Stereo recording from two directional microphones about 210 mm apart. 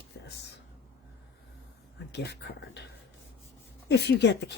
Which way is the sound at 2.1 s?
55° left (ahead or behind).